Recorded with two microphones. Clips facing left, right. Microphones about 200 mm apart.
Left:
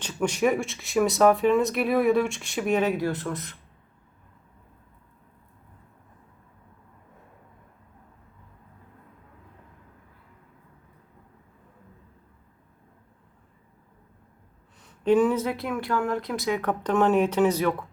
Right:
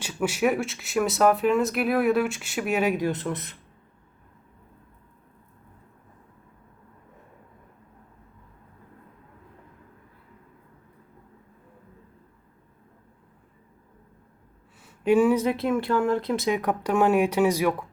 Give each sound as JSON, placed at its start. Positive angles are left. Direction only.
{"t": 0.0, "sound": "speech", "side_deg": -10}
{"t": 3.0, "sound": "speech", "side_deg": -20}
{"t": 14.8, "sound": "speech", "side_deg": -10}
{"t": 16.6, "sound": "speech", "side_deg": -10}